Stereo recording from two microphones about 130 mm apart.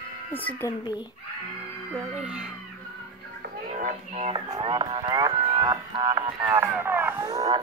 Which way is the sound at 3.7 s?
90° right.